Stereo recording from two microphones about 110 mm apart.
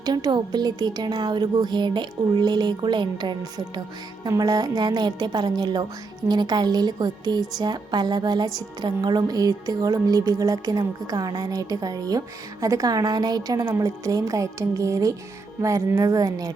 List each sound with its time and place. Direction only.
0.0 s a woman's voice: 40° right (ahead or behind)